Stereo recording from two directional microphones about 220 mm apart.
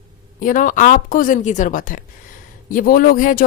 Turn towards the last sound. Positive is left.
turn(degrees=40)  # may be behind; listen again after turning